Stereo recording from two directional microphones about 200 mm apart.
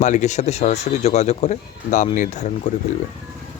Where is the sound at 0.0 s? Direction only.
35° left (ahead or behind).